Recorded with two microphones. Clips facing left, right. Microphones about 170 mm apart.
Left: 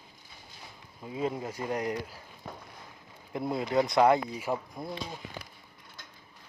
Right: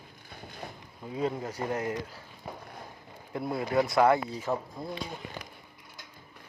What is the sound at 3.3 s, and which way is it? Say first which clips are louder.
Speech: even; 20° left (ahead or behind).